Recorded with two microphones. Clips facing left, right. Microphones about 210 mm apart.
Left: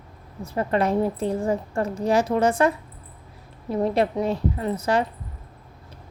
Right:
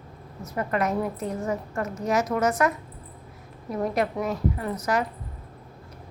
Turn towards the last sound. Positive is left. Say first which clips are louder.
# left 3 dB
turn(degrees=30)  # may be behind; listen again after turning